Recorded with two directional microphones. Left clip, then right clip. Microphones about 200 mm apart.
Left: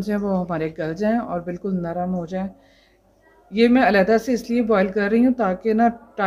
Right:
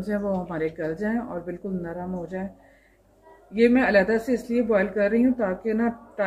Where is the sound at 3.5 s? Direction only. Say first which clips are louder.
Left 3 dB; 55° left (ahead or behind).